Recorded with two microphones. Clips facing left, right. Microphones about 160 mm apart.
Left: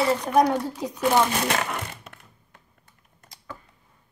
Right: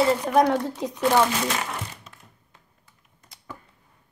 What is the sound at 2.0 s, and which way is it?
Typewriter, 60° left (ahead or behind).